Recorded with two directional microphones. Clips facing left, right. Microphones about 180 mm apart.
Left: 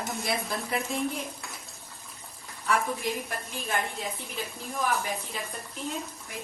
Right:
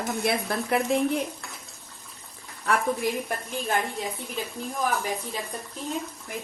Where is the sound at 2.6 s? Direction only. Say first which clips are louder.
Right 3 dB; 60° right (ahead or behind).